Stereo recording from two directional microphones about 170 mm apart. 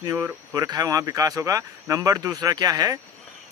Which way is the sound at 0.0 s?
15° right (ahead or behind).